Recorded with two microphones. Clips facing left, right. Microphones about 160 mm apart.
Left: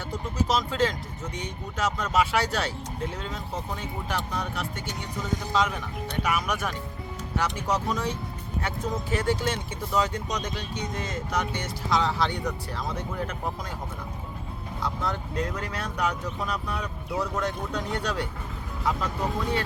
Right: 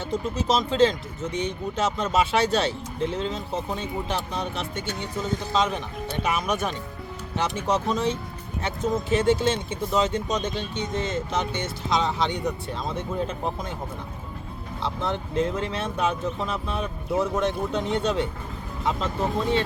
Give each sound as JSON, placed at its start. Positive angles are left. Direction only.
{"t": 0.1, "sound": "speech", "side_deg": -25}
{"t": 14.8, "sound": "speech", "side_deg": -25}